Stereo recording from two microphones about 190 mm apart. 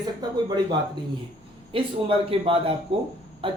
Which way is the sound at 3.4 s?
30° right (ahead or behind).